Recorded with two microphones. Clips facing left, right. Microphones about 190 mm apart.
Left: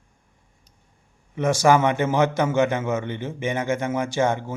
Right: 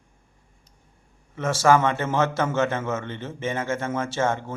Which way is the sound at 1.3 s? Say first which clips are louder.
Left 1 dB; 15° left (ahead or behind).